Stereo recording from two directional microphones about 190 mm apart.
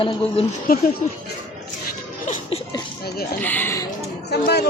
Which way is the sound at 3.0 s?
55° left (ahead or behind).